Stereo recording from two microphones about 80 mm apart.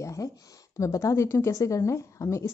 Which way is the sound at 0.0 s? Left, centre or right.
Left.